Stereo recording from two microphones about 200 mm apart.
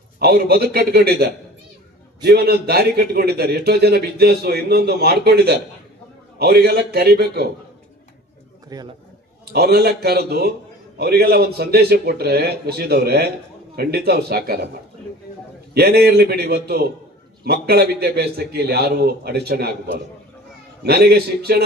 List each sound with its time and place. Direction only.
0.2 s a man's voice: 50° right (ahead or behind)
8.7 s a man's voice: 20° right (ahead or behind)
9.5 s a man's voice: 55° right (ahead or behind)
15.7 s a man's voice: 50° right (ahead or behind)
20.8 s a man's voice: 50° right (ahead or behind)